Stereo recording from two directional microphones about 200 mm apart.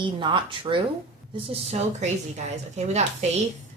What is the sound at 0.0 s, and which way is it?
Speech, 25° right (ahead or behind).